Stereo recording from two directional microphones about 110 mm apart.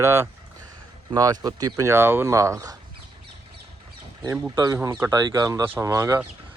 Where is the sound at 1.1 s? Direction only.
35° right (ahead or behind).